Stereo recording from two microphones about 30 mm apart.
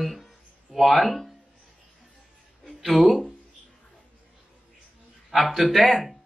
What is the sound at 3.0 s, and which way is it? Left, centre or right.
Speech, centre.